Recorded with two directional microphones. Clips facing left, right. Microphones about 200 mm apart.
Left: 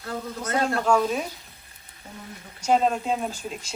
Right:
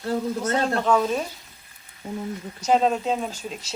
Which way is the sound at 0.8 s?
Centre (ahead or behind).